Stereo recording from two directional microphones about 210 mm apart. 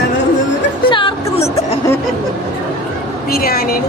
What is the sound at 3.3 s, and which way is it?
Speech, 45° left (ahead or behind).